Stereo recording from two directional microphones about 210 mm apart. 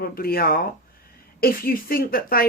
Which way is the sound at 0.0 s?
45° left (ahead or behind).